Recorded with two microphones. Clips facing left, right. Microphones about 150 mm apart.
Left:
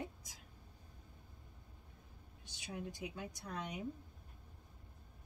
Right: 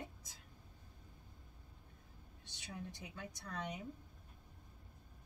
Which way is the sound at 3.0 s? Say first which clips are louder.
Left 4 dB; 15° left (ahead or behind).